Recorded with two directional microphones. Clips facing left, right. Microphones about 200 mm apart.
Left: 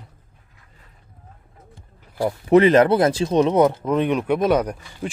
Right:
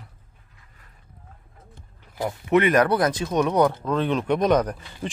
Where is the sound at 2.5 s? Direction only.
30° left (ahead or behind).